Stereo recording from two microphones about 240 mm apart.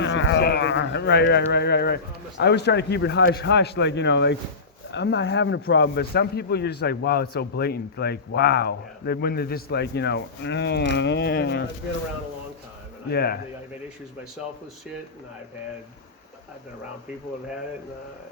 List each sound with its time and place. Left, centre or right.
0.0 s a man's voice: left
13.1 s speech: left